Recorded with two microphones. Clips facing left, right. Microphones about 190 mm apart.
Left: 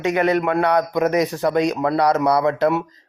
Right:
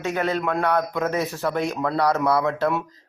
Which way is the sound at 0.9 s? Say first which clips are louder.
Left 6 dB; 15° left (ahead or behind).